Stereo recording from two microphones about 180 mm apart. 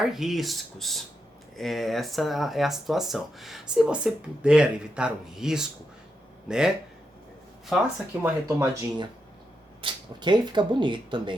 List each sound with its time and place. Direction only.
0.0 s speech: centre (ahead or behind)
8.2 s speech: 15° right (ahead or behind)